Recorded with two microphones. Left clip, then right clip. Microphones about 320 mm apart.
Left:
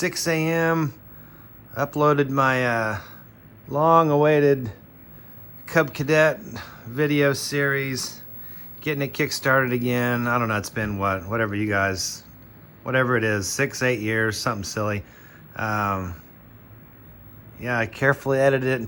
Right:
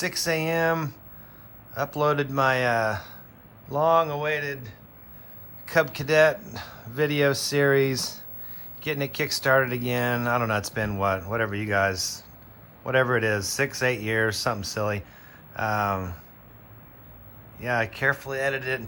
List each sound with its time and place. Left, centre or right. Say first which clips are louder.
0.0 s speech: left 2 dB; centre
17.6 s speech: left 2 dB; centre